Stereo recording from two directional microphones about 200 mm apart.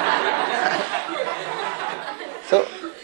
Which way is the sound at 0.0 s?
15° right (ahead or behind).